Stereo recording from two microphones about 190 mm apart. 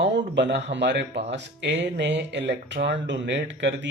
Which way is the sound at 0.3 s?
70° right (ahead or behind).